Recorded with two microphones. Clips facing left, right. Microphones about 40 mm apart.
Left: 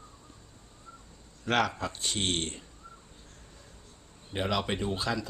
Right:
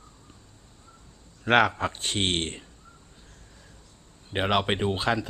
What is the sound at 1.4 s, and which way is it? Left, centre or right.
Speech, right.